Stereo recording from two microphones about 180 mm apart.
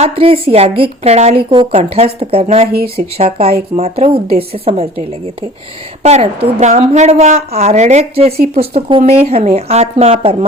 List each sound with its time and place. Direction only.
0.0 s a woman's voice: 30° right (ahead or behind)